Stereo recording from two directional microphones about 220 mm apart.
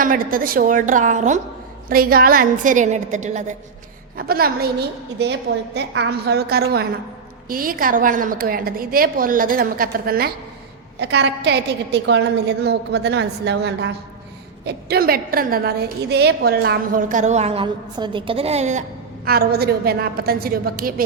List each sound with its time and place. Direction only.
0.0 s a woman's voice: 40° right (ahead or behind)